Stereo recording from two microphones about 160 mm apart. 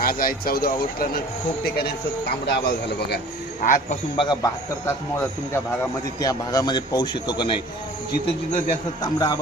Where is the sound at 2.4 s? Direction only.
90° left.